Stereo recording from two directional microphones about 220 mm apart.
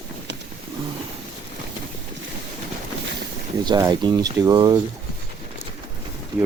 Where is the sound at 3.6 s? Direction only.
20° right (ahead or behind).